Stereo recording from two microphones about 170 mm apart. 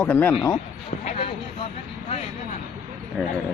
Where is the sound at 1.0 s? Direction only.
35° left (ahead or behind).